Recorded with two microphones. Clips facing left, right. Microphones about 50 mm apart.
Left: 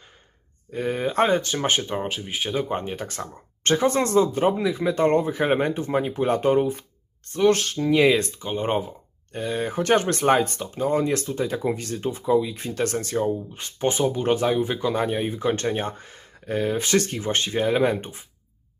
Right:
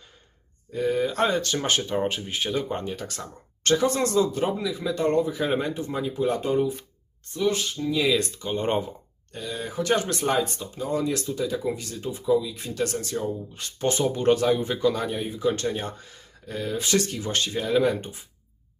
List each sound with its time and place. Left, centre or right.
0.7 s speech: left
1.5 s speech: left
2.0 s speech: centre
2.2 s speech: centre; by 6.7 s left
7.3 s speech: left
8.4 s speech: centre
9.3 s speech: left
13.5 s speech: left
14.1 s speech: centre
14.3 s speech: centre
14.9 s speech: left